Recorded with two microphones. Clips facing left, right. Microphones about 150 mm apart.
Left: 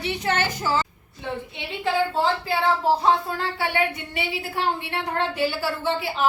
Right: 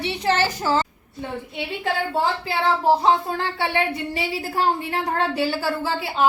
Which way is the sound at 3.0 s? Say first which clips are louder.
Right 2 dB; 20° right (ahead or behind).